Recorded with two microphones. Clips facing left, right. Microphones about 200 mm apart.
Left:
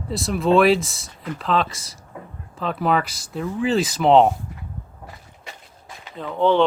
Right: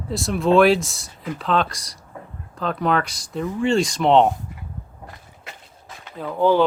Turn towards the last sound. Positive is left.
turn(degrees=-5)  # may be behind; listen again after turning